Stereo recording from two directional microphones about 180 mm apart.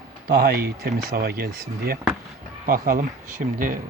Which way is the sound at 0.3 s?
55° right (ahead or behind).